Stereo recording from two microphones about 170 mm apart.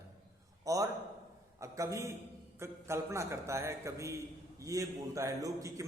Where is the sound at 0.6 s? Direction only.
20° right (ahead or behind).